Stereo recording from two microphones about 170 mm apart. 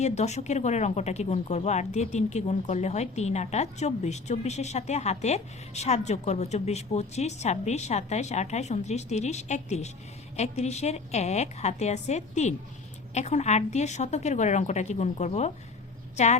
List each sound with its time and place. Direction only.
0.0 s a woman's voice: 40° left (ahead or behind)